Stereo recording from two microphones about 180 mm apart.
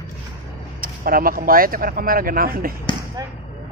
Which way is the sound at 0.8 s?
50° right (ahead or behind).